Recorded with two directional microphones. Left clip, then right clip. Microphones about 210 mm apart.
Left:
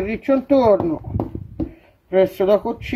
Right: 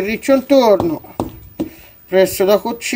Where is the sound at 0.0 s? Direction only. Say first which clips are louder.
Right 5 dB; 15° right (ahead or behind).